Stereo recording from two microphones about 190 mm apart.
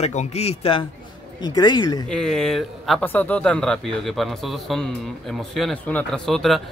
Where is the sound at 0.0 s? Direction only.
35° left (ahead or behind).